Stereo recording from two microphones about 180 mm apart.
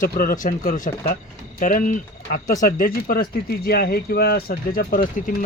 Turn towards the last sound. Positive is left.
turn(degrees=50)  # may be behind; listen again after turning